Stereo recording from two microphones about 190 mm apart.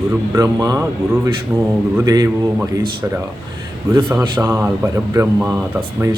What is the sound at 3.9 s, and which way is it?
Speech, 10° right (ahead or behind).